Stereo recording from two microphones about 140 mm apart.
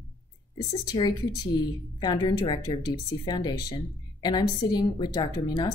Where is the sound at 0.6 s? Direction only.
30° left (ahead or behind).